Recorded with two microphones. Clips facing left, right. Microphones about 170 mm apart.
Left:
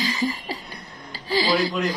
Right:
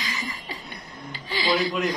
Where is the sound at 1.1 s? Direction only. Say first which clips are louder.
Left 6 dB; 35° left (ahead or behind).